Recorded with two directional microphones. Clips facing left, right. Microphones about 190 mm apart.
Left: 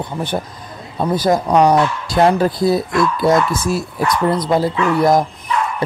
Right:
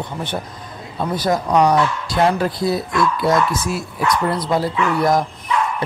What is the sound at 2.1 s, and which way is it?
Speech, 40° left (ahead or behind).